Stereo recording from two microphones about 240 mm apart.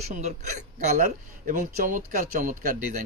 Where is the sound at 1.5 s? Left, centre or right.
Right.